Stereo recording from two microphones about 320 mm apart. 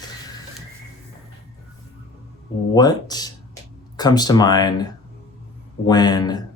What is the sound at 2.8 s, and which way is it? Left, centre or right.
Speech, centre.